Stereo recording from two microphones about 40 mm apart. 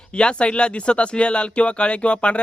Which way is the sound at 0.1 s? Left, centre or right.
Left.